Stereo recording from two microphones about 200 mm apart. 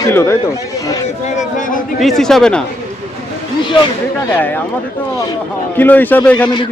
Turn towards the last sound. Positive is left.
turn(degrees=5)  # may be behind; listen again after turning